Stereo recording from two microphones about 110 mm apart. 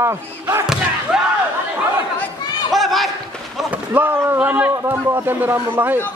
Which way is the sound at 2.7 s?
Centre (ahead or behind).